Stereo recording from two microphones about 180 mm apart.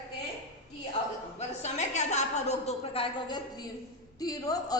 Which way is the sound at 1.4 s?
40° left (ahead or behind).